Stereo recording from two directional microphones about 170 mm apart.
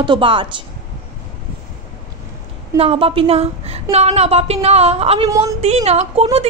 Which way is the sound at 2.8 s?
35° right (ahead or behind).